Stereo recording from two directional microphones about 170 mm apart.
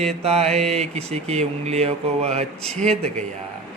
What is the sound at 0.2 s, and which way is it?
Speech, 35° right (ahead or behind).